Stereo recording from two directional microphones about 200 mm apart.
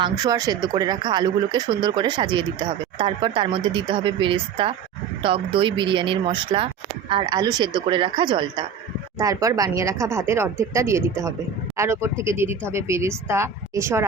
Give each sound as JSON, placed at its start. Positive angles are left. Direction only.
{"t": 0.0, "sound": "speech", "side_deg": -20}